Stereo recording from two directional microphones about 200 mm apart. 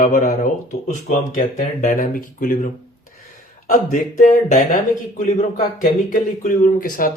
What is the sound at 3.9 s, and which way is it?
Speech, 40° left (ahead or behind).